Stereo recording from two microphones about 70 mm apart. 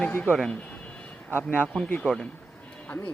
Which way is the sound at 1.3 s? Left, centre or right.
Left.